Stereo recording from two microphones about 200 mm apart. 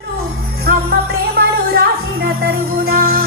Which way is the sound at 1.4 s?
50° right (ahead or behind).